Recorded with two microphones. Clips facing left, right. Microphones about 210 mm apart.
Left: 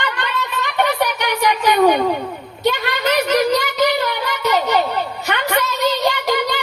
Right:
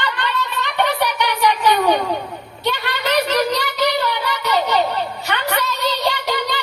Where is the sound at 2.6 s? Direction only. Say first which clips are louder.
Left 4 dB; 45° left (ahead or behind).